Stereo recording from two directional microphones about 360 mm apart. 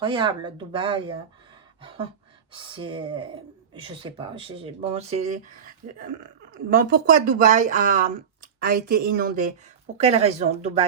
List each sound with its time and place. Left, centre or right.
0.0 s speech: centre
2.5 s speech: centre